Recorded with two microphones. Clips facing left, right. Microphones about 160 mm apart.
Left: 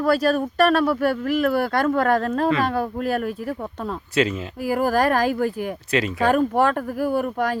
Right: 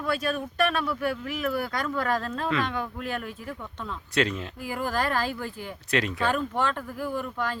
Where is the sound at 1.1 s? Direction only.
65° left (ahead or behind).